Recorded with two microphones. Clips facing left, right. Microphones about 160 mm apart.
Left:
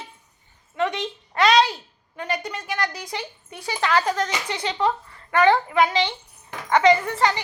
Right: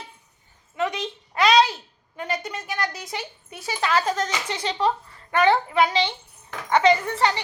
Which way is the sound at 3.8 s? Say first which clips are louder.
Left 1 dB; 20° right (ahead or behind).